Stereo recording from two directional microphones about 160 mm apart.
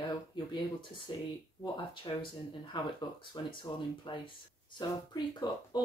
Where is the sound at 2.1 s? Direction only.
25° left (ahead or behind).